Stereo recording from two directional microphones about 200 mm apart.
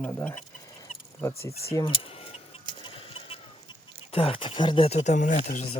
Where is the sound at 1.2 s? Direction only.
15° left (ahead or behind).